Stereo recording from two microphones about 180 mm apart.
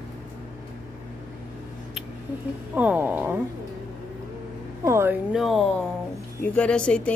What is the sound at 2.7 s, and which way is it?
Speech, 10° right (ahead or behind).